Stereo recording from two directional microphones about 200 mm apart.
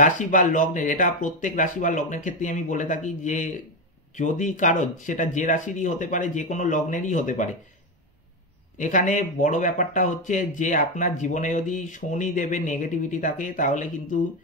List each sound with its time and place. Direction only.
0.0 s speech: 40° left (ahead or behind)
8.7 s speech: 40° left (ahead or behind)